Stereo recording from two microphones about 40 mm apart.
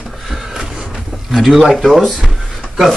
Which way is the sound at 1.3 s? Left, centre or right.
Centre.